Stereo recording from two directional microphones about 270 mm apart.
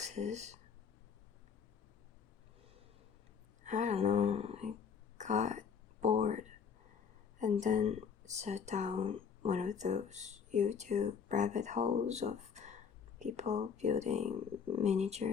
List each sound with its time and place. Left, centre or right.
0.0 s speech: right
3.6 s speech: right
5.1 s a sound: right
7.3 s speech: right